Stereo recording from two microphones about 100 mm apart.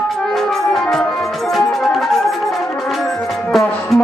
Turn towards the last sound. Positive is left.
turn(degrees=0)  # may be behind; listen again after turning